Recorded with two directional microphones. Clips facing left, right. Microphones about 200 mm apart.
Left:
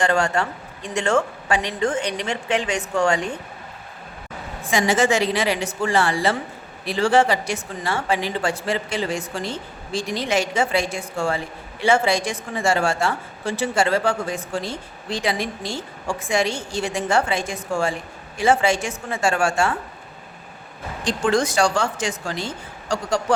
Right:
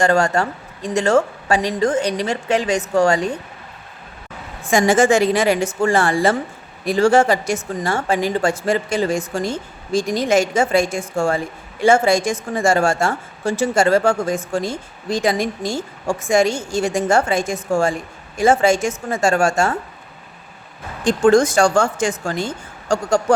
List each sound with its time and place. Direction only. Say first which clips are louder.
0.0 s speech: right 4 dB; 45° right (ahead or behind)
4.6 s speech: right 5 dB; 45° right (ahead or behind)
21.0 s speech: right 7 dB; 50° right (ahead or behind)